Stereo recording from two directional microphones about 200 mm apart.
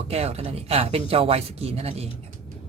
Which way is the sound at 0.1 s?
30° right (ahead or behind).